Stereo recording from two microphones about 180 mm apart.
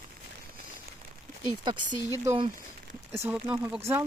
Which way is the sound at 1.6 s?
25° right (ahead or behind).